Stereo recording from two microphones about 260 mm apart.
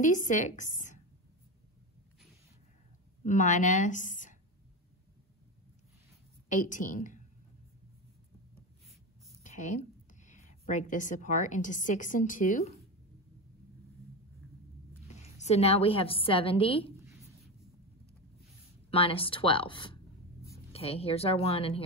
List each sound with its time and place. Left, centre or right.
0.0 s a woman's voice: left
3.3 s a woman's voice: left
6.5 s a woman's voice: left
9.4 s a sound: left
10.2 s a woman's voice: left
15.3 s a woman's voice: left
18.9 s a woman's voice: left